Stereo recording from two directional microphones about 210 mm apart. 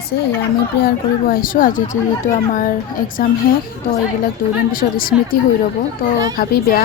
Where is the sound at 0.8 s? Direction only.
45° left (ahead or behind).